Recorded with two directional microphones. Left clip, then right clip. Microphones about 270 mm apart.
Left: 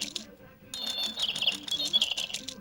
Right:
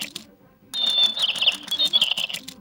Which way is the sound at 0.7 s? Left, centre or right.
Right.